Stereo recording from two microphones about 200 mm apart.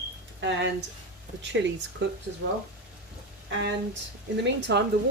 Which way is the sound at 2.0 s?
65° right (ahead or behind).